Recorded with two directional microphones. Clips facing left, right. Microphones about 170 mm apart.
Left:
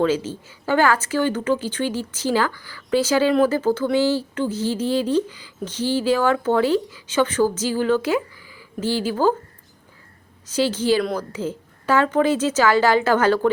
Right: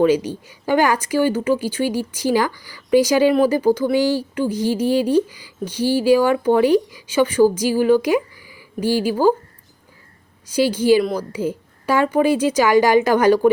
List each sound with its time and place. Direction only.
0.0 s speech: 15° right (ahead or behind)
10.4 s speech: 10° right (ahead or behind)